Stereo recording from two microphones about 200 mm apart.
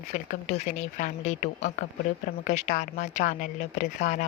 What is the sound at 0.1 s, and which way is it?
Speech, 35° left (ahead or behind).